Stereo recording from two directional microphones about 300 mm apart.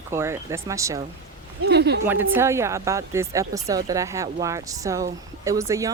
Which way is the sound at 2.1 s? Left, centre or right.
Centre.